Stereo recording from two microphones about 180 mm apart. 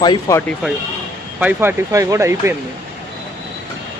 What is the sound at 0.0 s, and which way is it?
Speech, 25° left (ahead or behind).